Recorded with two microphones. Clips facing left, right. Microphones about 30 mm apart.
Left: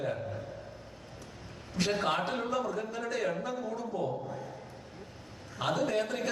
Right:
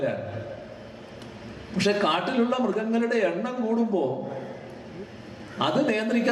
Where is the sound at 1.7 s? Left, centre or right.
Right.